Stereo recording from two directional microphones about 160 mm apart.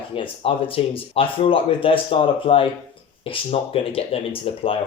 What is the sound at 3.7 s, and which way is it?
Speech, 35° left (ahead or behind).